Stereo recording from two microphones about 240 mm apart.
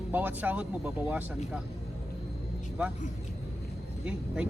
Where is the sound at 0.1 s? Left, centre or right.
Centre.